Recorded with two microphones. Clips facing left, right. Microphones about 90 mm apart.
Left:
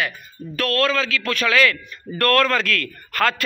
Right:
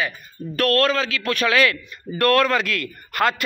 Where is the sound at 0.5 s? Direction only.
45° right (ahead or behind).